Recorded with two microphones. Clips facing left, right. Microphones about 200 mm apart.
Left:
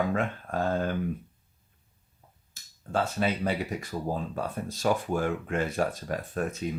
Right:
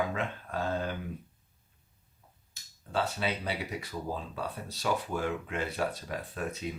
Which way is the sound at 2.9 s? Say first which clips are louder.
Left 4 dB; 50° left (ahead or behind).